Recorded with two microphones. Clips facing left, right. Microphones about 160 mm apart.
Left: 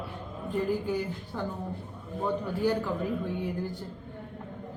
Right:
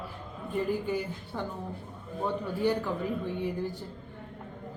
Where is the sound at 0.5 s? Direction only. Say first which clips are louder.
Left 1 dB; centre (ahead or behind).